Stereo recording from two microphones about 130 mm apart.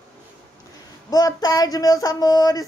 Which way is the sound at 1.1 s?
30° left (ahead or behind).